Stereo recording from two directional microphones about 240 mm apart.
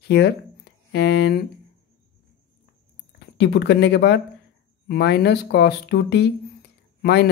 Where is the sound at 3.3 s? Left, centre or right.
Left.